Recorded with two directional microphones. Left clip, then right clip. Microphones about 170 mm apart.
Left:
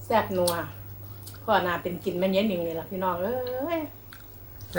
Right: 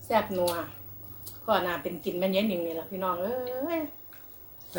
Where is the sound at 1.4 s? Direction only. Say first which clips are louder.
Left 3 dB; 10° right (ahead or behind).